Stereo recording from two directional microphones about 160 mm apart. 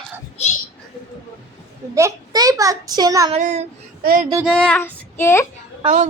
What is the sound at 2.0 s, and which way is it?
A child's voice, 20° right (ahead or behind).